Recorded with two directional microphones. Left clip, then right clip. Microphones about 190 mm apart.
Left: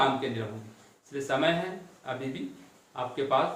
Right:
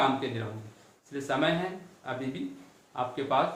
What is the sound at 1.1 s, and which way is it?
Speech, 25° right (ahead or behind).